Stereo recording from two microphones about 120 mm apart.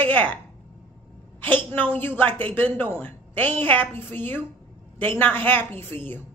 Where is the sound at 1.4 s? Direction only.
15° left (ahead or behind).